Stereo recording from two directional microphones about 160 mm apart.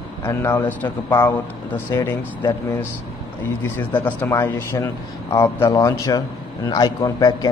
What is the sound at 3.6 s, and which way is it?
A man's voice, 10° left (ahead or behind).